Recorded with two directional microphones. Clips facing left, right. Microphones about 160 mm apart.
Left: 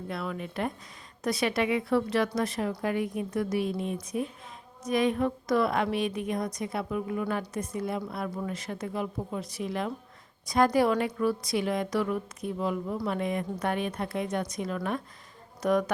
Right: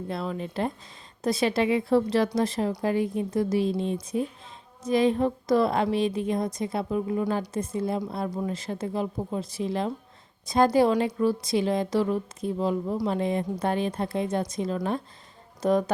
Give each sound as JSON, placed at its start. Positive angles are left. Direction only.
{"t": 0.1, "sound": "a woman's voice", "side_deg": -30}